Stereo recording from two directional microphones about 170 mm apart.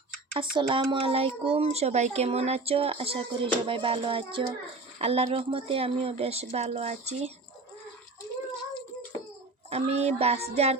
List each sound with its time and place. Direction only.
0.3 s speech: 30° right (ahead or behind)
9.6 s speech: 40° right (ahead or behind)